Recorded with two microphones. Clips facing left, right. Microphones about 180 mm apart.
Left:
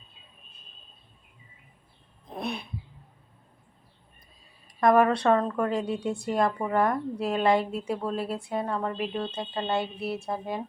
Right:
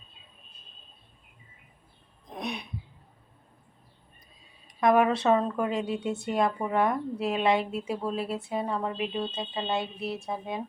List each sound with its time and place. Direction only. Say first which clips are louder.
2.3 s throat clearing: left 2 dB; centre (ahead or behind)
4.8 s speech: left 2 dB; centre (ahead or behind)